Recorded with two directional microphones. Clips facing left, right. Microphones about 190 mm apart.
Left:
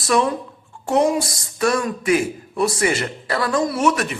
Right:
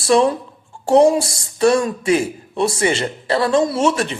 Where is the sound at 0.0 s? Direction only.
30° right (ahead or behind).